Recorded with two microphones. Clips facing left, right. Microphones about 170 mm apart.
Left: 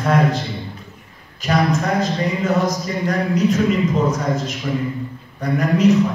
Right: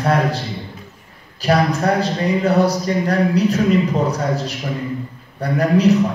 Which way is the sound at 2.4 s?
35° right (ahead or behind).